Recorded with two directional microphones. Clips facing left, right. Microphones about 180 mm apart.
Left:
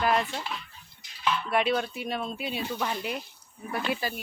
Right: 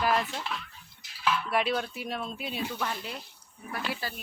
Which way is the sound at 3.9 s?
15° left (ahead or behind).